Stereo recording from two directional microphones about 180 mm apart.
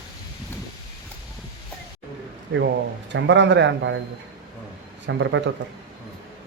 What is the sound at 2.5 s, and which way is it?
Speech, 70° right (ahead or behind).